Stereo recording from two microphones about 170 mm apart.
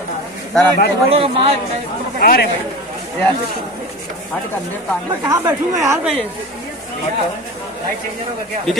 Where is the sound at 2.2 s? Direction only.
60° left (ahead or behind).